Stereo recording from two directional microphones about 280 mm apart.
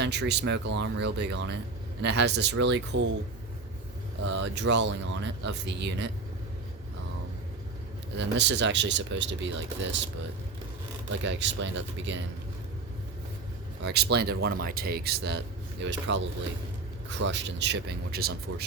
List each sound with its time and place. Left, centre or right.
0.0 s speech: right
4.3 s speech: right
8.1 s speech: right
11.2 s speech: right
13.8 s speech: right
17.2 s speech: right